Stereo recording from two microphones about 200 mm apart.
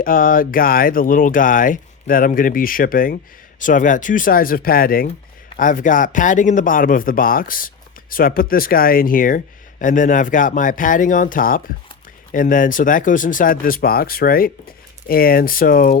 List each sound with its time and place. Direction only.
0.0 s speech: 45° left (ahead or behind)